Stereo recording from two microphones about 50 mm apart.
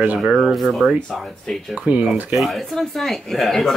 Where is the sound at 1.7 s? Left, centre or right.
Right.